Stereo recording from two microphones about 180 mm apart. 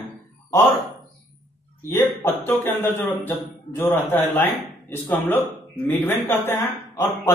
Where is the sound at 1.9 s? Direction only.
10° left (ahead or behind).